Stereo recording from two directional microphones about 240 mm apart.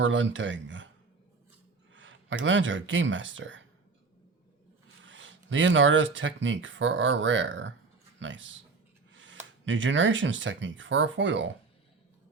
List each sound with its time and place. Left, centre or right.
0.0 s speech: right
1.9 s speech: right
5.0 s speech: right